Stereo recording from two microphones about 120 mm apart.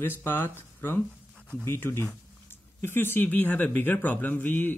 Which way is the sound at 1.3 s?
10° left (ahead or behind).